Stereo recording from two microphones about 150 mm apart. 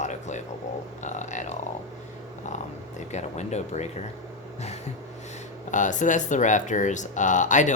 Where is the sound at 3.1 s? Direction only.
50° left (ahead or behind).